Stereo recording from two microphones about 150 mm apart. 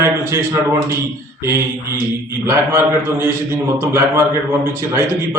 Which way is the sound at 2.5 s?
15° right (ahead or behind).